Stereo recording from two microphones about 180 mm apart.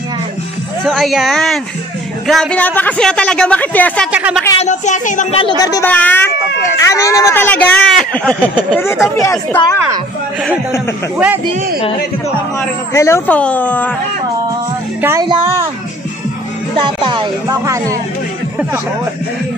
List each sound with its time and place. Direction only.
0.8 s speech: centre (ahead or behind)
4.1 s speech: 5° right (ahead or behind)
4.6 s speech: 40° left (ahead or behind)
5.6 s speech: 20° left (ahead or behind)
5.9 s speech: 10° left (ahead or behind)
11.5 s a man's voice: 55° right (ahead or behind)
12.9 s speech: 15° left (ahead or behind)
15.0 s speech: 15° right (ahead or behind)
16.7 s speech: 30° right (ahead or behind)